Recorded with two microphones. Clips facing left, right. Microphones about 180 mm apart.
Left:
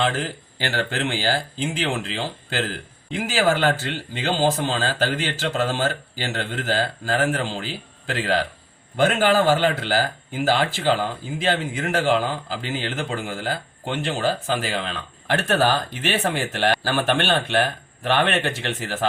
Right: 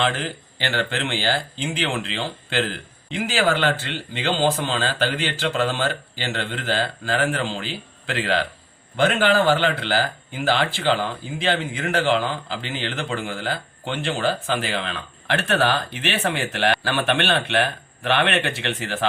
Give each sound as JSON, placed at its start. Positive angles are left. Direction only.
{"t": 0.6, "sound": "speech", "side_deg": 45}